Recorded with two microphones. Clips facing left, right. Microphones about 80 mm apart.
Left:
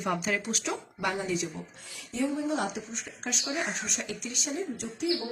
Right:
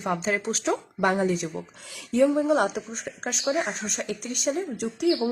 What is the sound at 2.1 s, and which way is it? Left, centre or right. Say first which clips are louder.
Speech: right 9 dB; right.